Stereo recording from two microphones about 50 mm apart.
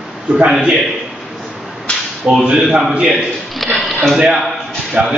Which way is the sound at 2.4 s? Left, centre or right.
Centre.